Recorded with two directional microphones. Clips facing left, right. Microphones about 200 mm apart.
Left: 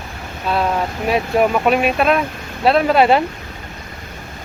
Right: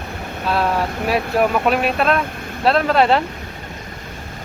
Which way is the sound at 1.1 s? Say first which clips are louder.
Left 2 dB; centre (ahead or behind).